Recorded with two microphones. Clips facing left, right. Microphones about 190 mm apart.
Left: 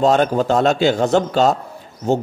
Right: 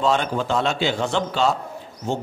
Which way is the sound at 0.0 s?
45° left (ahead or behind).